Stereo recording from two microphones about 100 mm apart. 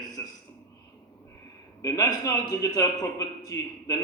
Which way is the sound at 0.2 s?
30° left (ahead or behind).